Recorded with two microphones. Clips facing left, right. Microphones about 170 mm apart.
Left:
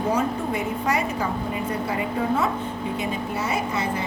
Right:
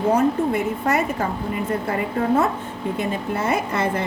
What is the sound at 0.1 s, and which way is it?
A woman's voice, 55° right (ahead or behind).